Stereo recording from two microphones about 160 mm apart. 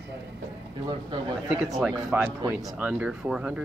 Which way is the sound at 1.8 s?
5° right (ahead or behind).